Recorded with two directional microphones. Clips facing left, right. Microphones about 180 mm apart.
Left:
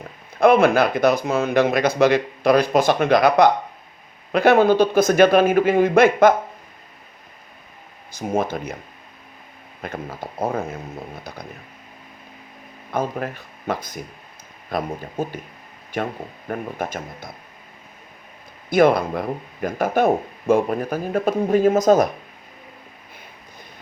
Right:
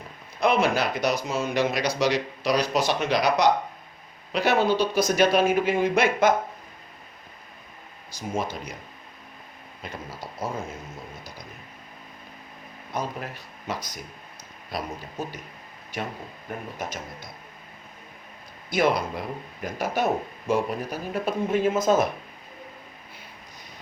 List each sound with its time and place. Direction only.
0.3 s speech: 55° left (ahead or behind)
8.1 s speech: 55° left (ahead or behind)
9.8 s speech: 50° left (ahead or behind)
12.9 s speech: 50° left (ahead or behind)
16.5 s speech: 55° left (ahead or behind)
18.7 s speech: 55° left (ahead or behind)